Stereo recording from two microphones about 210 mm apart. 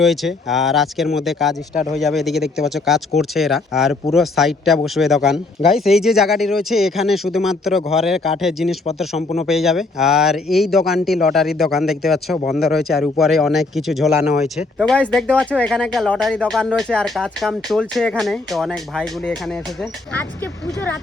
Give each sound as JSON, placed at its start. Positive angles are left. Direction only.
{"t": 0.0, "sound": "speech", "side_deg": 0}
{"t": 9.1, "sound": "speech", "side_deg": 30}
{"t": 9.5, "sound": "speech", "side_deg": 0}